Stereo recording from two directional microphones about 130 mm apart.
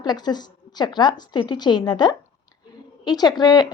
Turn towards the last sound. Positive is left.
turn(degrees=30)  # may be behind; listen again after turning